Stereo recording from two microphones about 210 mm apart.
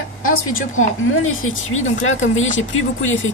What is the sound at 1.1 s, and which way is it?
A woman's voice, 75° left (ahead or behind).